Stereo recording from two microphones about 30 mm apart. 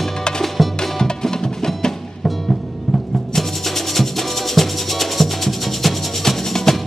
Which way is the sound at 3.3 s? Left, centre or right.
Centre.